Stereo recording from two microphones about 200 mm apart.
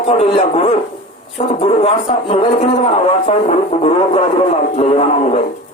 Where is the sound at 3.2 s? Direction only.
30° left (ahead or behind).